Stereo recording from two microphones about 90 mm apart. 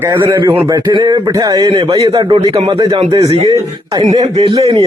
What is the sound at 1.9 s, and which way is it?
Speech, 40° right (ahead or behind).